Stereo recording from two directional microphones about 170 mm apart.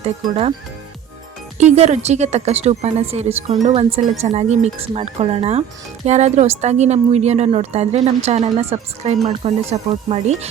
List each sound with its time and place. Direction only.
0.0 s speech: 35° right (ahead or behind)
1.7 s speech: 40° right (ahead or behind)